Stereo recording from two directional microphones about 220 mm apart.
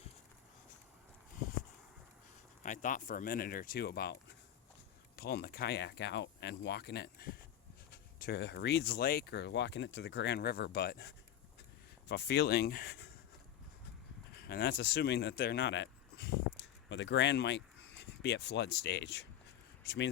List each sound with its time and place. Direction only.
2.6 s speech: 35° left (ahead or behind)
14.3 s speech: 45° left (ahead or behind)